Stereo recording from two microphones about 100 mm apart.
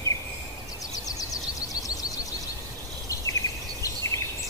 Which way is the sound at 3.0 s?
35° left (ahead or behind).